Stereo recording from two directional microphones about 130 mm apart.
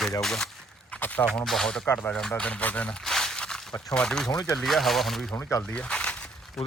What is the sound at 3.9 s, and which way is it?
Speech, 5° left (ahead or behind).